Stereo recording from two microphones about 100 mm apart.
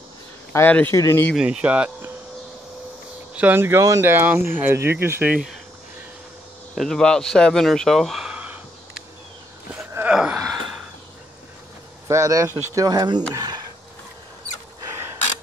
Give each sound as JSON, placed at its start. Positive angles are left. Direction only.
{"t": 0.5, "sound": "speech", "side_deg": 20}
{"t": 1.3, "sound": "speech", "side_deg": -10}
{"t": 3.3, "sound": "speech", "side_deg": -20}
{"t": 6.7, "sound": "speech", "side_deg": 0}
{"t": 10.0, "sound": "gasp", "side_deg": -10}
{"t": 12.1, "sound": "speech", "side_deg": -35}